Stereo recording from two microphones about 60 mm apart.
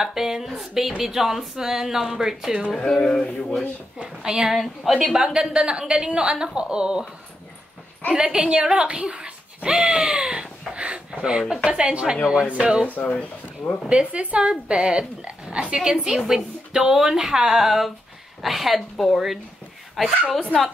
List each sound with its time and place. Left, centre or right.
0.0 s speech: centre
2.7 s a sound: centre
4.0 s speech: centre
8.1 s speech: centre
12.8 s speech: left
13.1 s a sound: centre
13.8 s speech: centre